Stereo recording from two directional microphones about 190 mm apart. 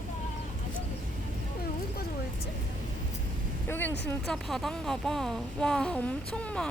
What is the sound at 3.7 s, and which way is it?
Speech, 10° left (ahead or behind).